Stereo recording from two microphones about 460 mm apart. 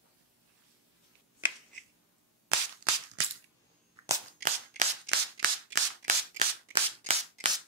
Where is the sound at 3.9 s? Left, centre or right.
Centre.